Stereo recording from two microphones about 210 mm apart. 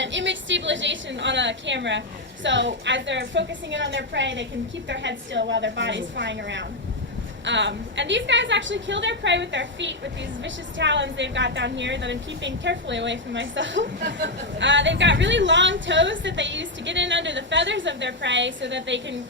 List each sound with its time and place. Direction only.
0.0 s a woman's voice: 60° right (ahead or behind)